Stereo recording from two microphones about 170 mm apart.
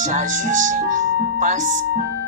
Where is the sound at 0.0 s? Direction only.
45° right (ahead or behind).